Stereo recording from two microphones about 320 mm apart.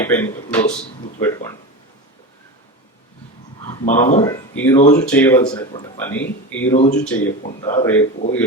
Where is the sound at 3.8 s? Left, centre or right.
Left.